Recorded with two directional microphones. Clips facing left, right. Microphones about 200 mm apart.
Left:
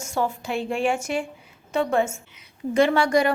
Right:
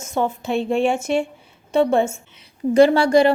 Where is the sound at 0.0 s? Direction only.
20° right (ahead or behind).